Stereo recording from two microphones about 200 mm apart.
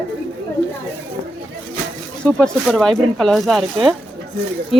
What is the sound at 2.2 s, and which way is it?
Speech, 5° left (ahead or behind).